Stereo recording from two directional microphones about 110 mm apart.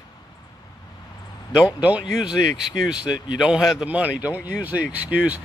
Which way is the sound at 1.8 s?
10° right (ahead or behind).